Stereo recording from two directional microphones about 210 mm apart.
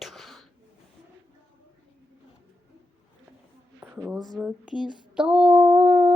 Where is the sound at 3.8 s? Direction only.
5° right (ahead or behind).